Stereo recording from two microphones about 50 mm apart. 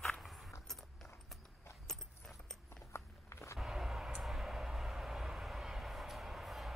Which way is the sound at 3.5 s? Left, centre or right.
Centre.